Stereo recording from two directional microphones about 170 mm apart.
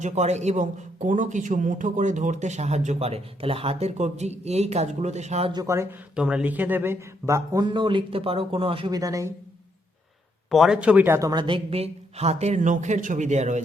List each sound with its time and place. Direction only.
0.0 s speech: 40° right (ahead or behind)
5.5 s speech: 20° right (ahead or behind)
6.1 s a man's voice: 5° right (ahead or behind); by 9.0 s 30° right (ahead or behind)
9.0 s a man's voice: 20° right (ahead or behind)
10.5 s a woman's voice: centre (ahead or behind); by 13.6 s 45° right (ahead or behind)